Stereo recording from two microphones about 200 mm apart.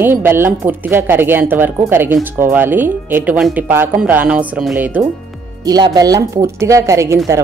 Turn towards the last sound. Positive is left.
turn(degrees=-15)  # may be behind; listen again after turning